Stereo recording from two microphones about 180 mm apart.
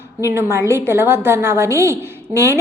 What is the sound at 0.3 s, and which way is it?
A woman's voice, 15° right (ahead or behind).